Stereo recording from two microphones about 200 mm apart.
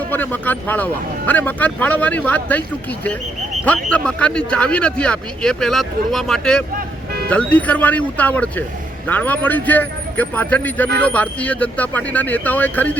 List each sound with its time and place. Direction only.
0.1 s a man's voice: 10° left (ahead or behind)